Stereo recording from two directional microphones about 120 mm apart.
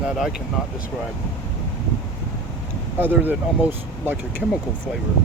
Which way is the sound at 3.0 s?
15° right (ahead or behind).